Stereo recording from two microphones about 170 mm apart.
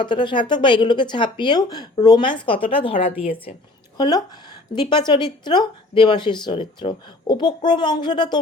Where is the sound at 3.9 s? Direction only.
25° left (ahead or behind).